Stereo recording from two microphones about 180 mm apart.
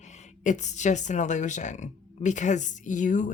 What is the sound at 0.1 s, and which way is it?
Speech, 40° left (ahead or behind).